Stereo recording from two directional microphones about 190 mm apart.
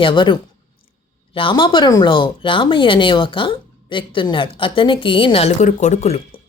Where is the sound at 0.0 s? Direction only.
25° left (ahead or behind).